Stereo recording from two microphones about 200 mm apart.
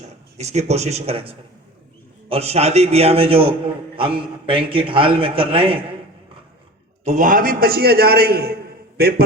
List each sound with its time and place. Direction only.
0.3 s a man's voice: 35° right (ahead or behind)
7.0 s a man's voice: 35° right (ahead or behind)